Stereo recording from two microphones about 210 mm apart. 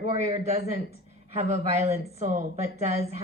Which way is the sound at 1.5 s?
30° right (ahead or behind).